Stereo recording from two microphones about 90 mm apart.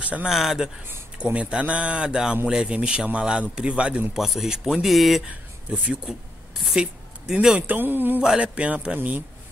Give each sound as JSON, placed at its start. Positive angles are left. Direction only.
{"t": 0.0, "sound": "speech", "side_deg": -15}
{"t": 0.8, "sound": "a man's voice", "side_deg": -20}
{"t": 8.2, "sound": "a man's voice", "side_deg": -10}